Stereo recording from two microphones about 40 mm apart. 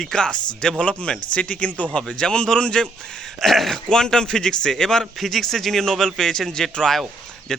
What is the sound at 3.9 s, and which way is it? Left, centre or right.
A man's voice, centre.